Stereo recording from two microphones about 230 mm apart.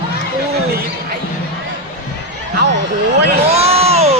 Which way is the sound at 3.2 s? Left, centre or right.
Right.